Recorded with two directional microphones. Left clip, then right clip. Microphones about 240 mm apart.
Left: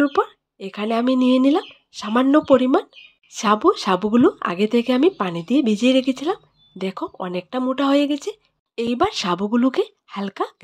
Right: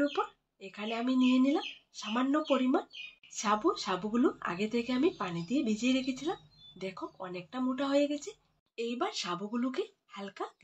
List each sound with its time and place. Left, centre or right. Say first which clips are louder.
0.0 s speech: left 13 dB; left